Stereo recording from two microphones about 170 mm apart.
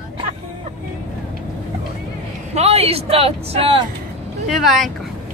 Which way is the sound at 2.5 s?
35° right (ahead or behind).